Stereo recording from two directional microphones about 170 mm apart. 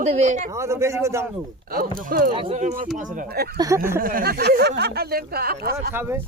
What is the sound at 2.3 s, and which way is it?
Speech, 40° right (ahead or behind).